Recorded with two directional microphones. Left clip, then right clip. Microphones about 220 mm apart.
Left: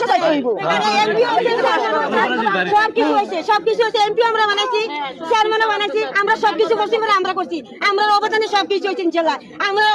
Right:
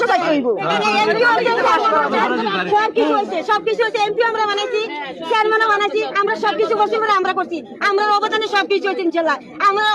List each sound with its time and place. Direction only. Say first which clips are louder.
0.0 s a sound: even; 20° right (ahead or behind)
0.9 s speech: right 1 dB; 25° right (ahead or behind)
2.3 s speech: left 1 dB; centre (ahead or behind)